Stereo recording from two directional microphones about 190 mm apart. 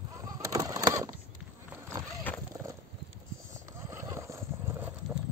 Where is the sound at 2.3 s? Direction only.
10° left (ahead or behind).